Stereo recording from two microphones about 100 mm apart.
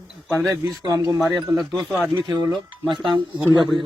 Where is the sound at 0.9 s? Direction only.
40° right (ahead or behind).